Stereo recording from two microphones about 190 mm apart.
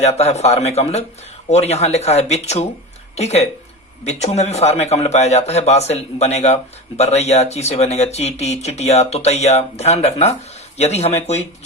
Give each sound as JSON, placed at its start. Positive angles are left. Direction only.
{"t": 0.0, "sound": "a man's voice", "side_deg": 35}